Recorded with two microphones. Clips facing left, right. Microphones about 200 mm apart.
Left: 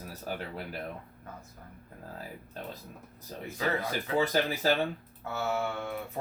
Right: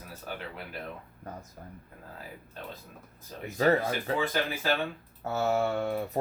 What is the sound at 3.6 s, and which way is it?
Speech, 40° right (ahead or behind).